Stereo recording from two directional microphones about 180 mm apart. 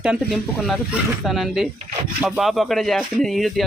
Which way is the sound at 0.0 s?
Centre (ahead or behind).